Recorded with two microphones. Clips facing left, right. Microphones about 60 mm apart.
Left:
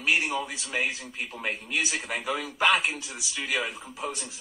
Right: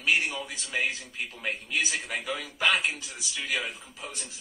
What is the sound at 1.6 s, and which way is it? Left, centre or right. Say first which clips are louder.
A man's voice: right 1 dB; left.